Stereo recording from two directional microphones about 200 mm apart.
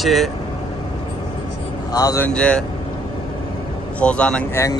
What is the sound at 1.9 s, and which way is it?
Speech, 15° left (ahead or behind).